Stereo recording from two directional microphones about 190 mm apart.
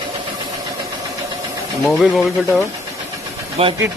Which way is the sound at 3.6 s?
30° right (ahead or behind).